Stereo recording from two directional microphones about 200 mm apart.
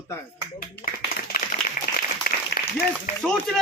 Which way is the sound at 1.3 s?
45° left (ahead or behind).